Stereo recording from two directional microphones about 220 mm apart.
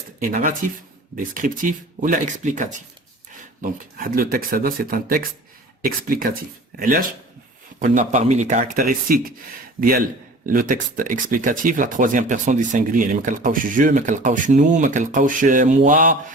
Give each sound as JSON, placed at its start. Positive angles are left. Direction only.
{"t": 0.2, "sound": "speech", "side_deg": -40}
{"t": 10.4, "sound": "speech", "side_deg": -40}